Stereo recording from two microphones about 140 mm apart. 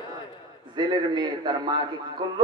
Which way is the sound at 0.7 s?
30° right (ahead or behind).